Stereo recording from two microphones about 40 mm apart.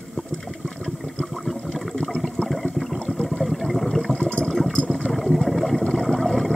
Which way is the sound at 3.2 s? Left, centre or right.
Centre.